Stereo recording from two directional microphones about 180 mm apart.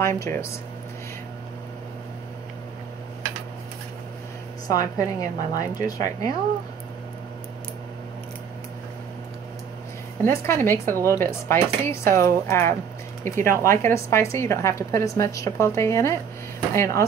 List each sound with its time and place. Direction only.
0.0 s a woman's voice: 15° left (ahead or behind)
4.6 s a woman's voice: 20° left (ahead or behind)
10.2 s a woman's voice: 15° left (ahead or behind)